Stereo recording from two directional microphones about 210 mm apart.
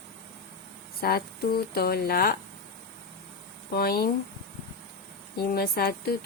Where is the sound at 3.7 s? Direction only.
45° left (ahead or behind).